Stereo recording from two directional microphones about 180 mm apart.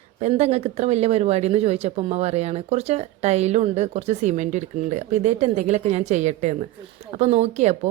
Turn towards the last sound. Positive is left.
turn(degrees=-40)  # may be behind; listen again after turning